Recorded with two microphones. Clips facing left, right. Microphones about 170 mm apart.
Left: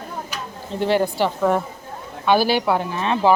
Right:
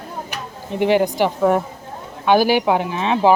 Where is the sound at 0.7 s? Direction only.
15° right (ahead or behind).